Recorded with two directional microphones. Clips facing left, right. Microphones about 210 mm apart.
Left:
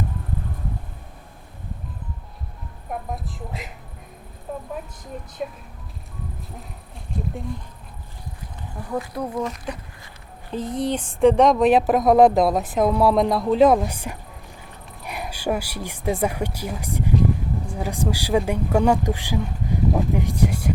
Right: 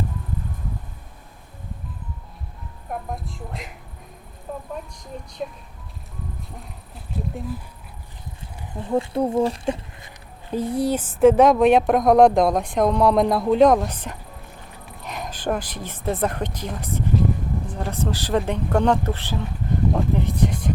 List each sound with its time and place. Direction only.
2.9 s speech: centre (ahead or behind)
7.3 s speech: 5° right (ahead or behind)
8.8 s speech: 25° right (ahead or behind)
10.5 s speech: 10° right (ahead or behind); by 14.2 s 10° left (ahead or behind)
15.0 s a sound: 10° left (ahead or behind)
16.1 s speech: 10° left (ahead or behind)